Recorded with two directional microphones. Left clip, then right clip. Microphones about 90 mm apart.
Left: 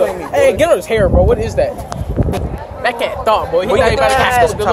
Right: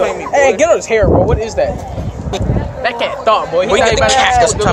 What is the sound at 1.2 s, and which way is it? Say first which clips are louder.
Speech: left 1 dB; 45° left (ahead or behind).